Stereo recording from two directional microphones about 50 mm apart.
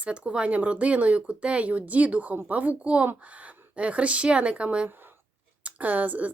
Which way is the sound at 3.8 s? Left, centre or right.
Right.